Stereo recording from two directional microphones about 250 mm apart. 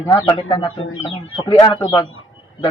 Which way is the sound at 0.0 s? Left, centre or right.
Centre.